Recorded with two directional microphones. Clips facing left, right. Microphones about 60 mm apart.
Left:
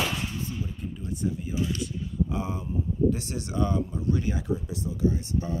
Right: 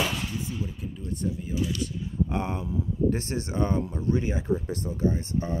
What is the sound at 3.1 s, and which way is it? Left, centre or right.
Speech, right.